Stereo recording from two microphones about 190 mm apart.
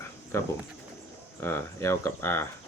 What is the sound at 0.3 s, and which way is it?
Speech, 15° left (ahead or behind).